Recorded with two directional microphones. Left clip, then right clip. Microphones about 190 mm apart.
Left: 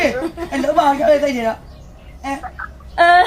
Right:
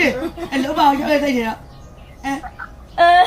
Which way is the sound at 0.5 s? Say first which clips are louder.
Left 1 dB; 20° left (ahead or behind).